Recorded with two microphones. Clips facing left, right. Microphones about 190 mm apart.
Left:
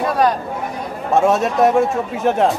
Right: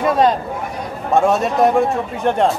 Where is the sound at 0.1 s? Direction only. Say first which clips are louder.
Right 2 dB; 20° right (ahead or behind).